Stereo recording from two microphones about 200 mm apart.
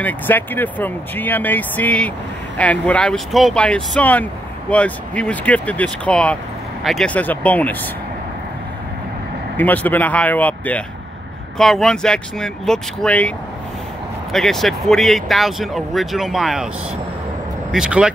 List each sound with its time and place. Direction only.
0.0 s speech: 10° left (ahead or behind)
9.6 s speech: 10° left (ahead or behind)
14.3 s speech: centre (ahead or behind)
17.6 s speech: 5° right (ahead or behind)